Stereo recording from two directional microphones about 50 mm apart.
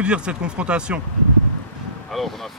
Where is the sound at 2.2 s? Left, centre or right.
Centre.